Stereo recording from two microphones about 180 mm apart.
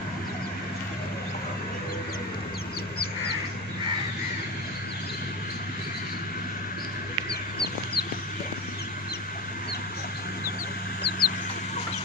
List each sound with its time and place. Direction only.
7.2 s chicken: 60° left (ahead or behind)
11.0 s chicken: 65° left (ahead or behind)